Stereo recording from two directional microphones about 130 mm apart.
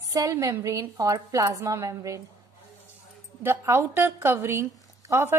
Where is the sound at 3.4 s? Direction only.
20° right (ahead or behind).